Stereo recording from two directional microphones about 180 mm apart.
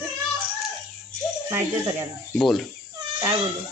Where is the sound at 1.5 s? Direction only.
15° right (ahead or behind).